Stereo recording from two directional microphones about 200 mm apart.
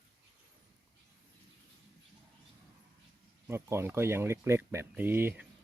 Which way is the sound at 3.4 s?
15° right (ahead or behind).